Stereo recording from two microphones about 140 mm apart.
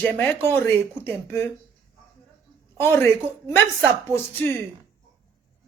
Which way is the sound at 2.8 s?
15° left (ahead or behind).